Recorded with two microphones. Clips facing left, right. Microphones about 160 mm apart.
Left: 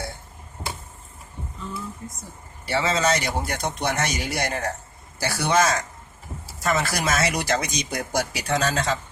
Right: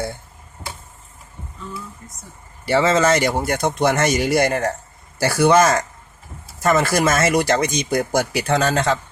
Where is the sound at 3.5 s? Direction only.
50° right (ahead or behind).